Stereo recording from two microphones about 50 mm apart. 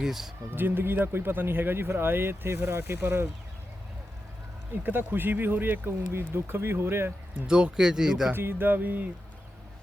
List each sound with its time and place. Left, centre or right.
0.0 s speech: centre
0.5 s speech: right
4.7 s speech: right
6.1 s speech: right
7.4 s speech: centre
8.3 s speech: right